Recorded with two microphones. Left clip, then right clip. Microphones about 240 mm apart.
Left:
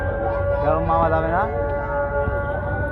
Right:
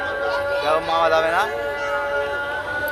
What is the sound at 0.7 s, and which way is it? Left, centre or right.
Music, right.